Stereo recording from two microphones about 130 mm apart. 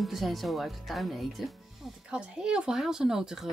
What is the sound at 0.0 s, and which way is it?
Speech, centre (ahead or behind).